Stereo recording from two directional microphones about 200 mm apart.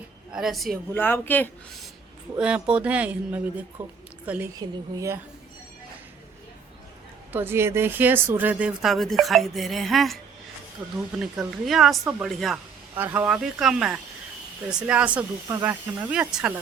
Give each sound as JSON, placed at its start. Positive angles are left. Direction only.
{"t": 0.3, "sound": "speech", "side_deg": -5}
{"t": 0.9, "sound": "speech", "side_deg": 10}
{"t": 2.3, "sound": "speech", "side_deg": -5}
{"t": 7.3, "sound": "speech", "side_deg": -10}